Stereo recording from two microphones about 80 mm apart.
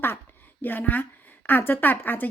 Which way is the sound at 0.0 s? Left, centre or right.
Left.